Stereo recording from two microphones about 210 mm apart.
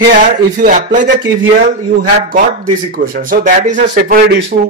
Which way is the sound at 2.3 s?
40° right (ahead or behind).